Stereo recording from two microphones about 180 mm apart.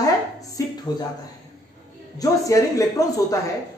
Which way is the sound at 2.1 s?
20° left (ahead or behind).